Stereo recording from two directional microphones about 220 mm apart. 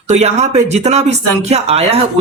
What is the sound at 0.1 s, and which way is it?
A woman's voice, 30° right (ahead or behind).